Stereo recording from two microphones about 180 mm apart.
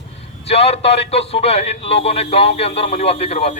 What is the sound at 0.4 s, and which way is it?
A man's voice, 35° left (ahead or behind).